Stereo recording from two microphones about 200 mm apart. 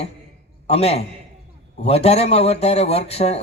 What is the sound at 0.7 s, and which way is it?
A man's voice, 30° left (ahead or behind).